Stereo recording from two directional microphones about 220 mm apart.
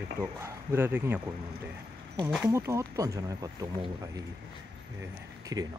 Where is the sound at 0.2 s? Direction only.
10° right (ahead or behind).